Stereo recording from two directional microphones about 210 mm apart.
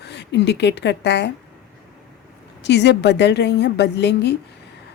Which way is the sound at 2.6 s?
55° left (ahead or behind).